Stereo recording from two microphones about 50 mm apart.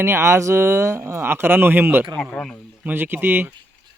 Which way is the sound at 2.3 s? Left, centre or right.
Centre.